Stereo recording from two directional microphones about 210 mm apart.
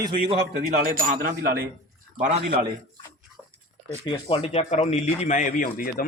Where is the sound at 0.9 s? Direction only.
45° right (ahead or behind).